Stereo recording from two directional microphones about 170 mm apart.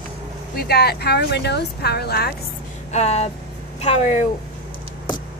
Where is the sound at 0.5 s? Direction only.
70° left (ahead or behind).